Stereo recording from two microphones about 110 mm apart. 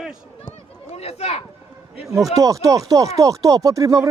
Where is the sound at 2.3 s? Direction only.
30° right (ahead or behind).